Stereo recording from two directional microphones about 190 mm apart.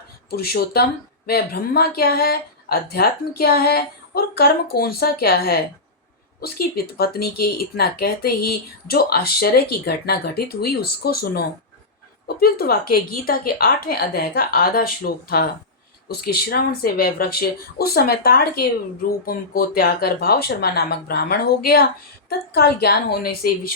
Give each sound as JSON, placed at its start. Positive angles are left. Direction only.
{"t": 0.3, "sound": "a woman's voice", "side_deg": 55}